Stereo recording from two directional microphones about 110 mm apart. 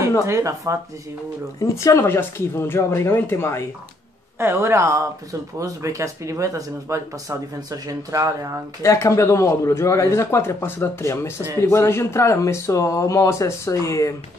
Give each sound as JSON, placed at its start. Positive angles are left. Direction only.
{"t": 0.3, "sound": "speech", "side_deg": -25}
{"t": 1.6, "sound": "speech", "side_deg": 30}
{"t": 4.4, "sound": "speech", "side_deg": -20}
{"t": 8.8, "sound": "speech", "side_deg": 25}